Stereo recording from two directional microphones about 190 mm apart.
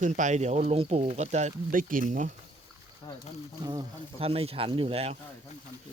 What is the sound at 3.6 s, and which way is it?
Speech, 25° right (ahead or behind).